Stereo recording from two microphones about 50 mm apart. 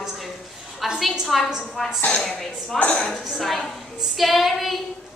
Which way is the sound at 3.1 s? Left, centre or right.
Centre.